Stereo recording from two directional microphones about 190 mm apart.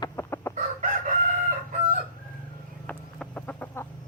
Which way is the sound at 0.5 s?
40° right (ahead or behind).